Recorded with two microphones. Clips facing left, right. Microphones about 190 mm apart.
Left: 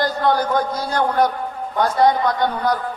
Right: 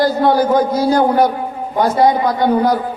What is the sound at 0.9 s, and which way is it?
Speech, 25° right (ahead or behind).